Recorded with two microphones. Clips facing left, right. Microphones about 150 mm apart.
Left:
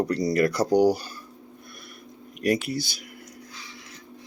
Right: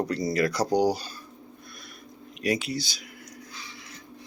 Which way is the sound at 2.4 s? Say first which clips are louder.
Left 3 dB; 55° left (ahead or behind).